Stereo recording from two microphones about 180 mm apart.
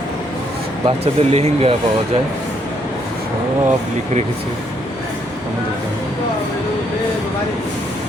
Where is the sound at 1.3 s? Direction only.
35° right (ahead or behind).